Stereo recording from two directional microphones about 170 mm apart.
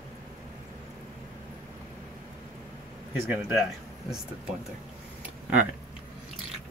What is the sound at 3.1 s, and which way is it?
Speech, 10° right (ahead or behind).